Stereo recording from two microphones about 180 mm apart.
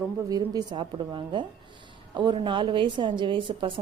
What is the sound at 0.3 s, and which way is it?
A woman's voice, 20° right (ahead or behind).